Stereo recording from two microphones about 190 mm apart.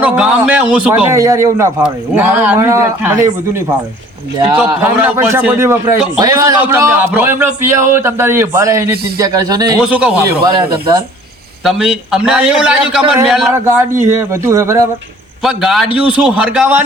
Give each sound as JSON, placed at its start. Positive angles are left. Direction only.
{"t": 0.0, "sound": "a man's voice", "side_deg": -5}
{"t": 4.8, "sound": "a man's voice", "side_deg": -10}
{"t": 9.8, "sound": "a man's voice", "side_deg": -5}
{"t": 10.4, "sound": "a man's voice", "side_deg": -20}
{"t": 11.6, "sound": "a man's voice", "side_deg": 0}
{"t": 13.5, "sound": "a man's voice", "side_deg": -15}
{"t": 15.4, "sound": "a man's voice", "side_deg": 0}